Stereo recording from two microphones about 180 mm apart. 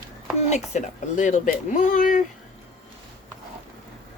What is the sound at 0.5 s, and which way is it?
Speech, 40° left (ahead or behind).